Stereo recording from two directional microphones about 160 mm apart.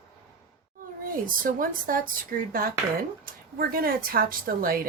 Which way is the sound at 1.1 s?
60° right (ahead or behind).